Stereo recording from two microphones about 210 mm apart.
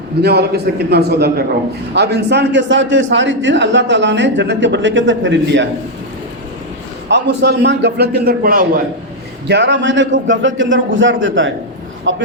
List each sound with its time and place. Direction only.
0.2 s a man's voice: 50° right (ahead or behind)
7.1 s a man's voice: 55° right (ahead or behind)
9.5 s a man's voice: 55° right (ahead or behind)